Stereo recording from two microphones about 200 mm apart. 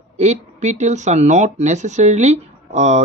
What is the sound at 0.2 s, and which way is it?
Speech, 35° right (ahead or behind).